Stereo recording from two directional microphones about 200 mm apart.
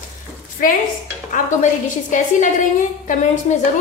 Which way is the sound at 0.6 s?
45° left (ahead or behind).